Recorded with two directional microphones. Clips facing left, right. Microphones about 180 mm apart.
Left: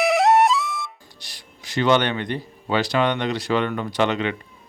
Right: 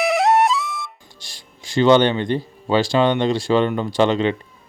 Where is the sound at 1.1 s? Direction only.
25° right (ahead or behind).